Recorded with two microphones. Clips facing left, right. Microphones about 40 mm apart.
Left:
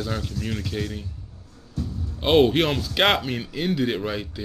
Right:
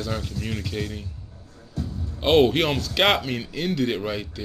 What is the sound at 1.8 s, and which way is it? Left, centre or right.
Music, right.